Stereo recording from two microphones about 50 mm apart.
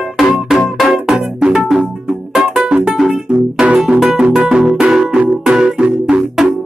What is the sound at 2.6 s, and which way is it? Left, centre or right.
Music, right.